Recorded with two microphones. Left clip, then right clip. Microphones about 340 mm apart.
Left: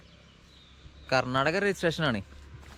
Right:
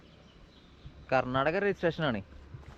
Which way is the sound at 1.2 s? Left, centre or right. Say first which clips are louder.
Left 2 dB; centre.